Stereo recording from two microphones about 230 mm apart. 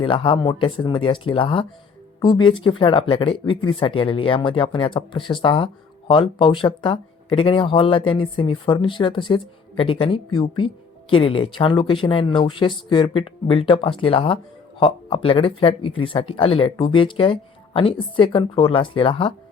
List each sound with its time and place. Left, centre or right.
0.0 s speech: left